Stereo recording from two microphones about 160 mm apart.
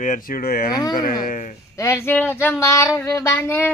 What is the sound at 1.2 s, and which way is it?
Speech, 55° left (ahead or behind).